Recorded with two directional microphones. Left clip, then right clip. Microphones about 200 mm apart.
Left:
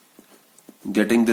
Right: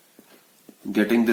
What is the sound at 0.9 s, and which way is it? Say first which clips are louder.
Speech: left 1 dB; 50° left (ahead or behind).